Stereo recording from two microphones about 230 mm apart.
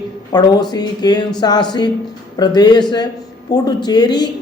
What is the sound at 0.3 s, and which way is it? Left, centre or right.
Speech, centre.